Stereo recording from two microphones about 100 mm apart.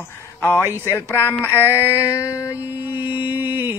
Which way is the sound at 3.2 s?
20° right (ahead or behind).